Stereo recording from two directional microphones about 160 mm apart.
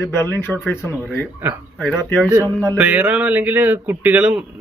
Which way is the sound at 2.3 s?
20° right (ahead or behind).